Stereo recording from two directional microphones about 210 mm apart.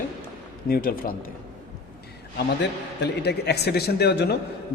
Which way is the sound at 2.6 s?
55° left (ahead or behind).